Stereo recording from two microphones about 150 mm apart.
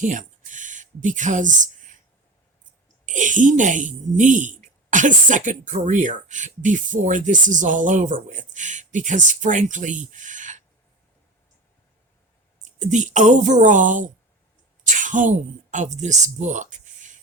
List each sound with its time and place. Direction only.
0.0 s speech: 60° right (ahead or behind)
3.1 s speech: 55° right (ahead or behind)
12.6 s speech: 55° right (ahead or behind)